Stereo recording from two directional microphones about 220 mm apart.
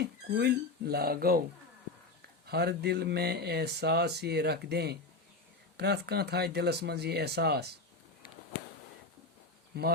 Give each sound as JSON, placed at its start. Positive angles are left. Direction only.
{"t": 0.0, "sound": "speech", "side_deg": -50}
{"t": 2.5, "sound": "speech", "side_deg": -45}
{"t": 9.7, "sound": "speech", "side_deg": -45}